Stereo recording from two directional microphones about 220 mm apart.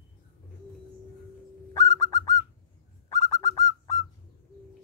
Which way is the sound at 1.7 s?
15° left (ahead or behind).